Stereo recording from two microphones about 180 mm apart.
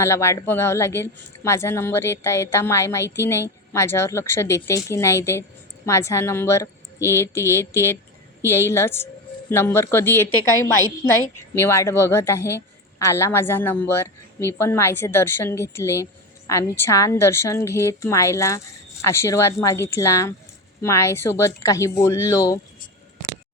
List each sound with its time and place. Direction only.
0.0 s a woman's voice: 15° left (ahead or behind)